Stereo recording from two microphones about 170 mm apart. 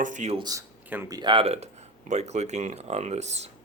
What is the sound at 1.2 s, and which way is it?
Speech, 30° right (ahead or behind).